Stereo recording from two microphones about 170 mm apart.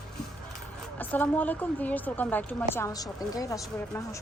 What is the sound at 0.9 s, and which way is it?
A woman's voice, 10° left (ahead or behind).